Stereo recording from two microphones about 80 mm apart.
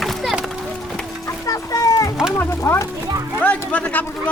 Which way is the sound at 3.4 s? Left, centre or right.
Centre.